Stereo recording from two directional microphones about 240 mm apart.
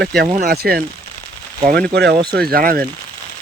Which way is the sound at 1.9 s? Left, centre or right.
Right.